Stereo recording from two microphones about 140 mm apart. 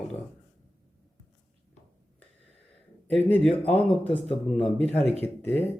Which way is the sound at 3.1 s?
15° left (ahead or behind).